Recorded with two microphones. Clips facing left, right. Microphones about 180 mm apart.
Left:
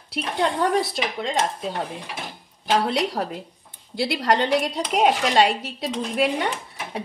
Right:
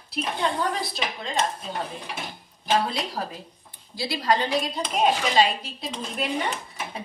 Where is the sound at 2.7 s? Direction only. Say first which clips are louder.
Left 4 dB; 75° left (ahead or behind).